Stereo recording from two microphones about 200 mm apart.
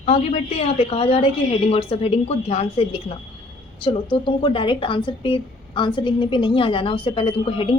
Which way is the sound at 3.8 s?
25° left (ahead or behind).